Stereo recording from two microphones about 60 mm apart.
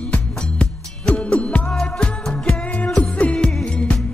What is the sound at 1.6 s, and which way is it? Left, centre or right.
Music, centre.